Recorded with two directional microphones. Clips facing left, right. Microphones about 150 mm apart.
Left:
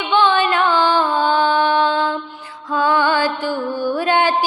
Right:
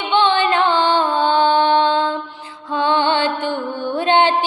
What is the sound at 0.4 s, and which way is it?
Music, 25° right (ahead or behind).